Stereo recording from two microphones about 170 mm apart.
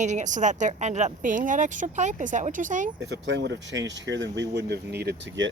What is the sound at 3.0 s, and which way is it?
Speech, 90° right.